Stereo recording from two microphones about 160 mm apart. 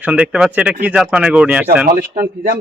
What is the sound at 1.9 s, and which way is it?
Speech, 60° right (ahead or behind).